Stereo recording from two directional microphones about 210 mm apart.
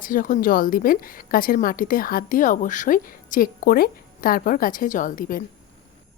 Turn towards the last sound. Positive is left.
turn(degrees=40)  # may be behind; listen again after turning